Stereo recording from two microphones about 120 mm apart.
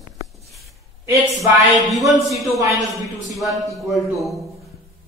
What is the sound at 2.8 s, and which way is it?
Speech, 30° right (ahead or behind).